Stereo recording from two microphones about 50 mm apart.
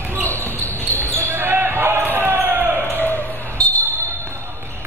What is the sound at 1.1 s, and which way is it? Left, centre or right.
Basketball bounce, right.